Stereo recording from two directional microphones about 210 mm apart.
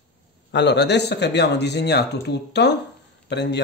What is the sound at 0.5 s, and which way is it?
Speech, 55° left (ahead or behind).